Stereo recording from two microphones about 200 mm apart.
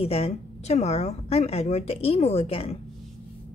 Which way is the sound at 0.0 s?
30° left (ahead or behind).